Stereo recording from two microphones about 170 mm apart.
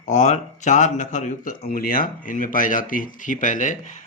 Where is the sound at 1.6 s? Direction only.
55° left (ahead or behind).